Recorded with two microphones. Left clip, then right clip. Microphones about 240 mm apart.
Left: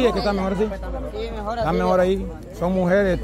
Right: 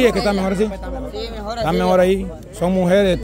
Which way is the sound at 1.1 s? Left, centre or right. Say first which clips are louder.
Left 1 dB; right.